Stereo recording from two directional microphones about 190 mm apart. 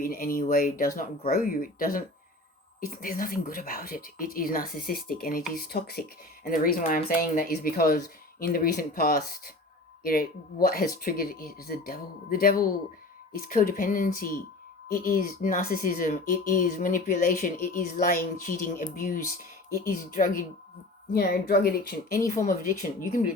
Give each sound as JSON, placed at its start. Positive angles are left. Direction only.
{"t": 0.0, "sound": "speech", "side_deg": 50}